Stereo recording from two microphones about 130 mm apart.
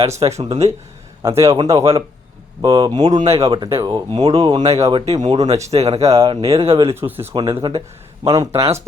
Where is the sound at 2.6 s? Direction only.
40° right (ahead or behind).